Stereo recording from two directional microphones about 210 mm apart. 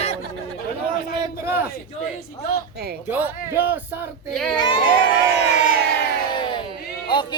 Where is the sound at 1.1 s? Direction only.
10° right (ahead or behind).